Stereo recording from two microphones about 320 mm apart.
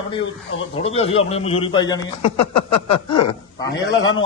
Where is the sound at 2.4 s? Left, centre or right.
Left.